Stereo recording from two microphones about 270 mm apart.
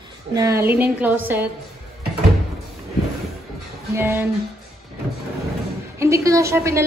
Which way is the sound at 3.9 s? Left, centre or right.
Centre.